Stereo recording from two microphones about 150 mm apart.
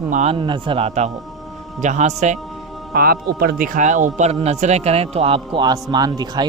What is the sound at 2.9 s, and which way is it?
A man's voice, 80° right.